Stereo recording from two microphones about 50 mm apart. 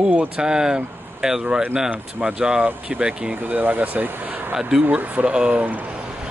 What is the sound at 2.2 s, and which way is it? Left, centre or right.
Speech, right.